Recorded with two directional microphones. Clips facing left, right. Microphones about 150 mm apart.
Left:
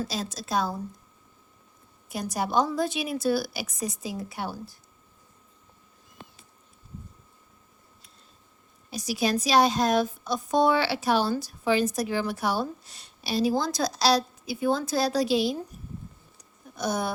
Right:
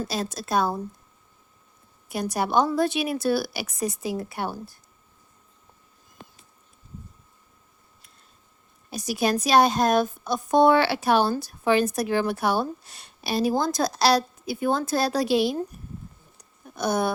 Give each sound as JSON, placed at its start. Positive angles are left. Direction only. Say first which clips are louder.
{"t": 0.1, "sound": "a woman's voice", "louder": "right 3 dB", "side_deg": -60}
{"t": 2.0, "sound": "a woman's voice", "louder": "right 3 dB", "side_deg": -65}
{"t": 8.9, "sound": "a woman's voice", "louder": "right 2 dB", "side_deg": -50}
{"t": 16.7, "sound": "a sound", "louder": "right 4 dB", "side_deg": -60}